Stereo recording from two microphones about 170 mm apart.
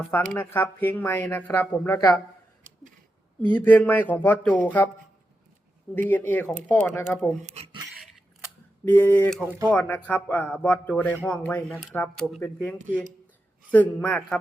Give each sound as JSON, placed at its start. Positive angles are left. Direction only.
{"t": 0.1, "sound": "speech", "side_deg": 10}
{"t": 3.4, "sound": "speech", "side_deg": 10}
{"t": 5.9, "sound": "speech", "side_deg": 10}
{"t": 7.4, "sound": "speech", "side_deg": -40}
{"t": 8.8, "sound": "speech", "side_deg": 10}